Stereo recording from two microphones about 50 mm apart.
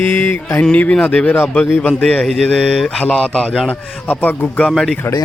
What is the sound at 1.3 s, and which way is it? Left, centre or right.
Speech, left.